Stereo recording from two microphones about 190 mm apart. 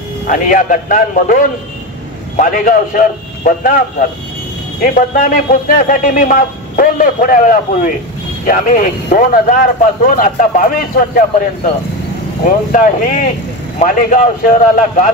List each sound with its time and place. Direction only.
0.3 s a man's voice: 45° left (ahead or behind)
4.8 s a man's voice: 45° left (ahead or behind)